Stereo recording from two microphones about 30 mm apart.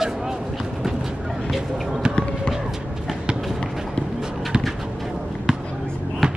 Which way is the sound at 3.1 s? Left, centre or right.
Centre.